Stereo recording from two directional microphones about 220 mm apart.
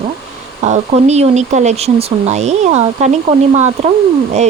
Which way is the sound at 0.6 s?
30° right (ahead or behind).